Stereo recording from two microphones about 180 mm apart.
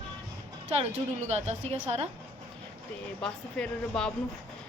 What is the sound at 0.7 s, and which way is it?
A woman's voice, 35° right (ahead or behind).